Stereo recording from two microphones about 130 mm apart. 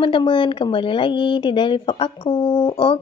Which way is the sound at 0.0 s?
40° left (ahead or behind).